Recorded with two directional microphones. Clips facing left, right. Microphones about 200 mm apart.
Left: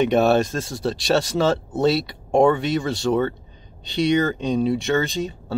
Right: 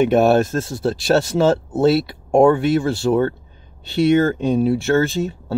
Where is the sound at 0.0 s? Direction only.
5° right (ahead or behind).